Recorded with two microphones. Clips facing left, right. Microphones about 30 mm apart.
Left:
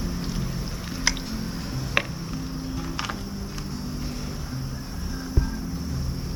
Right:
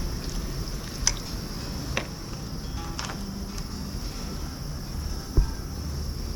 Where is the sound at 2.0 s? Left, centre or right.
Left.